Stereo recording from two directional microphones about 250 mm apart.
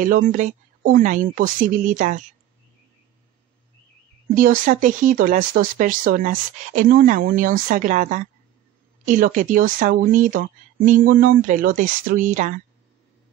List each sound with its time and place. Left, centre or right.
0.0 s speech: right
4.4 s speech: right